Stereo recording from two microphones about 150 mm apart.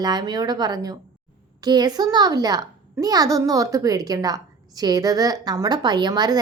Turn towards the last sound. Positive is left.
turn(degrees=-25)  # may be behind; listen again after turning